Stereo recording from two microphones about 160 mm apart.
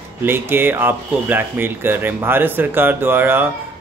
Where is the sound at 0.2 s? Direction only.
15° right (ahead or behind).